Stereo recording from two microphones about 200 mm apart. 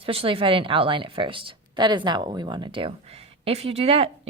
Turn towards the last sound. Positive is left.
turn(degrees=-30)  # may be behind; listen again after turning